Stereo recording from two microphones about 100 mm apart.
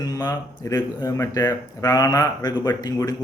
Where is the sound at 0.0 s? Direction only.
40° left (ahead or behind).